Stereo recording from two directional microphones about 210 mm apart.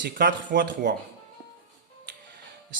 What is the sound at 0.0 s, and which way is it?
Speech, 45° right (ahead or behind).